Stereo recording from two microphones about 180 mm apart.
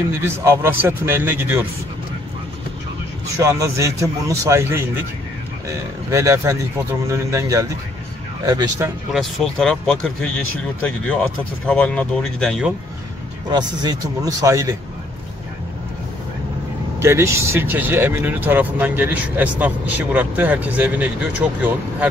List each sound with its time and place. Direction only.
0.2 s speech: 15° right (ahead or behind)
3.3 s speech: 15° right (ahead or behind)
6.1 s speech: 15° right (ahead or behind)
9.1 s speech: centre (ahead or behind)
13.5 s speech: 25° right (ahead or behind)
17.0 s speech: 15° right (ahead or behind)